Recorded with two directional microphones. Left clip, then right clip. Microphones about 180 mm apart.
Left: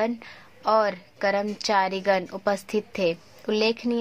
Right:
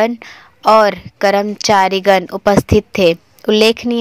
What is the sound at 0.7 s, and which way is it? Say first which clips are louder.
A woman's voice: right 12 dB; 35° right (ahead or behind).